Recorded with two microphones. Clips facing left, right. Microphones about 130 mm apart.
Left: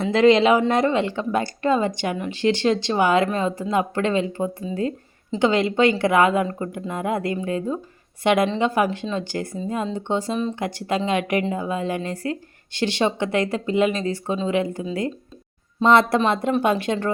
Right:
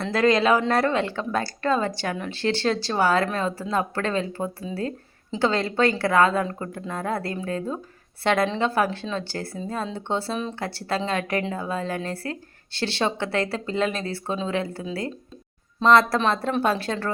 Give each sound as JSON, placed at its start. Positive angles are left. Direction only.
{"t": 0.1, "sound": "a man's voice", "side_deg": 25}
{"t": 15.9, "sound": "a man's voice", "side_deg": 25}